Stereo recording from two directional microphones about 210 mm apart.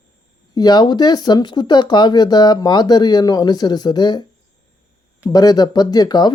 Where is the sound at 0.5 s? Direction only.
20° left (ahead or behind).